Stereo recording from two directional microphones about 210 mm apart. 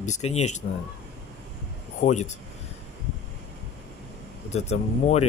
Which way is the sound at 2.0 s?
35° left (ahead or behind).